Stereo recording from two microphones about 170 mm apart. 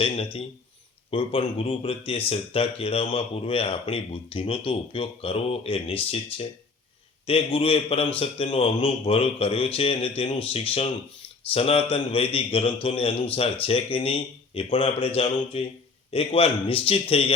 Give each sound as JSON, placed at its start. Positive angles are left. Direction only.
{"t": 1.1, "sound": "speech", "side_deg": 30}